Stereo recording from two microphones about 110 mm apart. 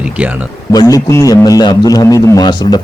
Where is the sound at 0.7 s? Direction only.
35° left (ahead or behind).